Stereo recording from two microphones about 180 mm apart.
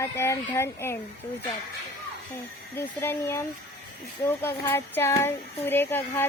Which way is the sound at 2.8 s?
15° left (ahead or behind).